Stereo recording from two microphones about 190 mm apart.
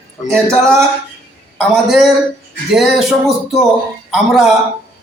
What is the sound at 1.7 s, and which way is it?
A man's voice, centre (ahead or behind).